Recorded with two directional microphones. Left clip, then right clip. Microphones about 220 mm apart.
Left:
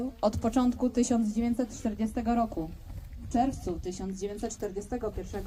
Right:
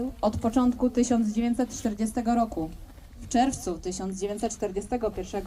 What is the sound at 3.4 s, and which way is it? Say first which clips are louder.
A woman's voice: right 4 dB; 25° right (ahead or behind).